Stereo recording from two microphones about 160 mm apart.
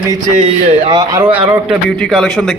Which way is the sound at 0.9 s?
25° right (ahead or behind).